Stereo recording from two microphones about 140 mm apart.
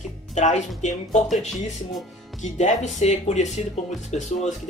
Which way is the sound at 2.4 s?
55° left (ahead or behind).